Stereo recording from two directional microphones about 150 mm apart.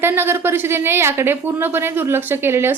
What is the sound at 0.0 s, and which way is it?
A woman's voice, 15° right (ahead or behind).